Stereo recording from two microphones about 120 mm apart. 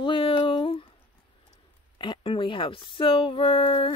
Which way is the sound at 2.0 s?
45° left (ahead or behind).